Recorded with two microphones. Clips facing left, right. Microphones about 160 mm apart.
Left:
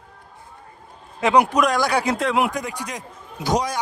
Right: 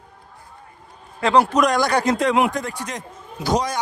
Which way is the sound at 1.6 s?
5° left (ahead or behind).